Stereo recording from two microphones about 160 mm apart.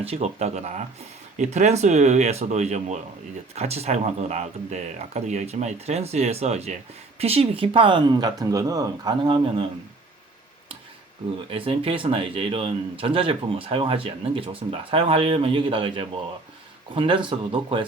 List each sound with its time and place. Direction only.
0.0 s speech: 40° right (ahead or behind)
11.5 s speech: 35° right (ahead or behind)